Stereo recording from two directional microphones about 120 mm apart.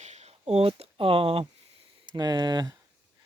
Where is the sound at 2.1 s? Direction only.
35° right (ahead or behind).